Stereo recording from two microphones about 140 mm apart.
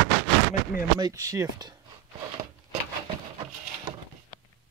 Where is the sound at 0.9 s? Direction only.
25° right (ahead or behind).